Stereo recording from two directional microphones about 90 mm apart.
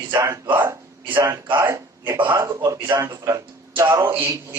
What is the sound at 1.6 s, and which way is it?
A man's voice, 30° right (ahead or behind).